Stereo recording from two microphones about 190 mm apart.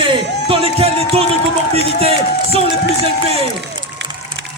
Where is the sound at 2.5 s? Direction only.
30° right (ahead or behind).